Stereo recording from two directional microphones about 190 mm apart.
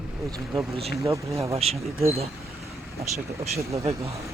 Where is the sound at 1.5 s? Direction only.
35° right (ahead or behind).